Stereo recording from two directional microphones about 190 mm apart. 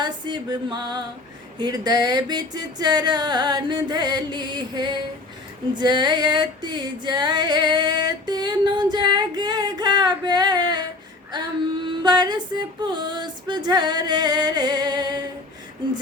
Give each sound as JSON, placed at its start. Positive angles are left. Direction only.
{"t": 0.0, "sound": "female singing", "side_deg": -20}
{"t": 11.3, "sound": "a sound", "side_deg": -20}
{"t": 11.9, "sound": "female singing", "side_deg": -25}